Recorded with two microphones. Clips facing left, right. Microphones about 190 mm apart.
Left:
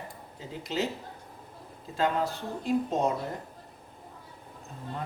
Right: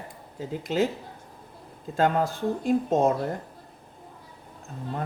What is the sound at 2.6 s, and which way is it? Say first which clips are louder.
Mantra: right 4 dB; 45° right (ahead or behind).